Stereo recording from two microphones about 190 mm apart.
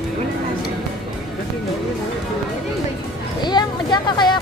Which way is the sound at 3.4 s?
20° left (ahead or behind).